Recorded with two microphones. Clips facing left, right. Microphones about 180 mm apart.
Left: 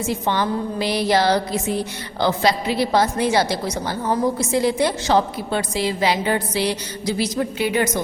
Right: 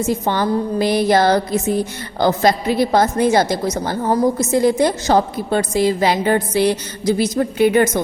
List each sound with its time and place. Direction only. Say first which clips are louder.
0.0 s a woman's voice: right 3 dB; 45° right (ahead or behind)